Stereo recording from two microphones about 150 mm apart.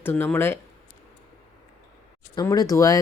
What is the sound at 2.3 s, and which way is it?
Speech, 25° left (ahead or behind).